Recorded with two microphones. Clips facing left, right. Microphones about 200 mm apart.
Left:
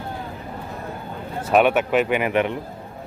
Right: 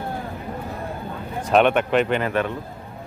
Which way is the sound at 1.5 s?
5° left (ahead or behind).